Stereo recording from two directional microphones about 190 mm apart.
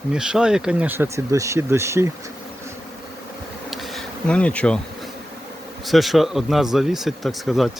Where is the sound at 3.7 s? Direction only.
Centre (ahead or behind).